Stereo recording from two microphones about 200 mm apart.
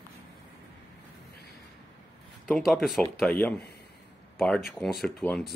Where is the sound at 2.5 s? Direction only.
Centre (ahead or behind).